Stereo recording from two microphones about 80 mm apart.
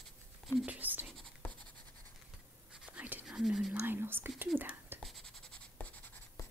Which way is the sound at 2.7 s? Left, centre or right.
Centre.